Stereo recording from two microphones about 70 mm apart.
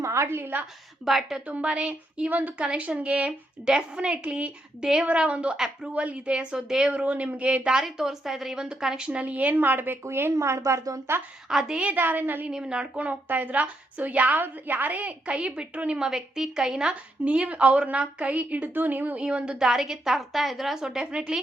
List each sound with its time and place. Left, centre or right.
0.0 s a woman's voice: right
1.0 s a woman's voice: centre
1.5 s a woman's voice: centre
5.9 s a woman's voice: centre
7.0 s a woman's voice: centre; by 11.0 s right
11.4 s a woman's voice: centre
11.9 s a woman's voice: right
12.5 s a woman's voice: centre
19.2 s a woman's voice: centre